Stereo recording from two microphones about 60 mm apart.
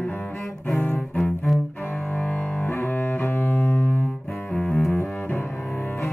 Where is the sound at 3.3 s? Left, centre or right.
Left.